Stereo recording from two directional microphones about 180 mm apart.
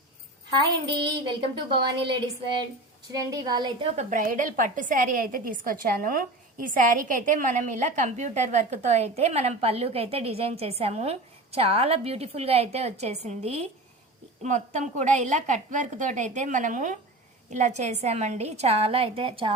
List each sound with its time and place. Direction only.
1.2 s a woman's voice: 25° right (ahead or behind)
3.9 s a woman's voice: 50° right (ahead or behind); by 19.5 s 30° right (ahead or behind)